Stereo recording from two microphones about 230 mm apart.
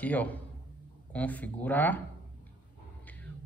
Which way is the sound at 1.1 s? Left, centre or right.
Centre.